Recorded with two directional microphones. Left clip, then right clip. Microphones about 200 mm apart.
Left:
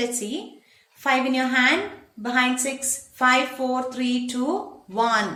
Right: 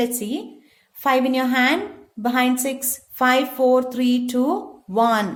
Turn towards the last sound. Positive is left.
turn(degrees=-55)  # may be behind; listen again after turning